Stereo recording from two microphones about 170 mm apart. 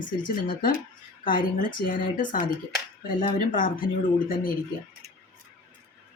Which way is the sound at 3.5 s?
50° left (ahead or behind).